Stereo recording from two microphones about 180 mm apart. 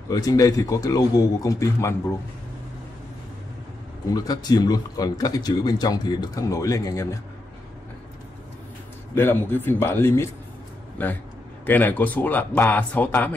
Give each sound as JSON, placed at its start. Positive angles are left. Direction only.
{"t": 0.1, "sound": "speech", "side_deg": 20}
{"t": 4.1, "sound": "speech", "side_deg": 20}
{"t": 9.1, "sound": "speech", "side_deg": 10}